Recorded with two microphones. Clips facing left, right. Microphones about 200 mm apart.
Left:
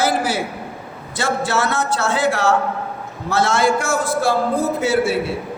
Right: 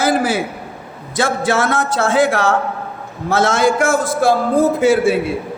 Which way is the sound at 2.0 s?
50° right (ahead or behind).